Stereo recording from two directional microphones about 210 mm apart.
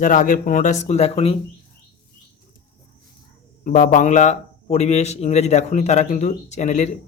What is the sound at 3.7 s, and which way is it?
Speech, 40° left (ahead or behind).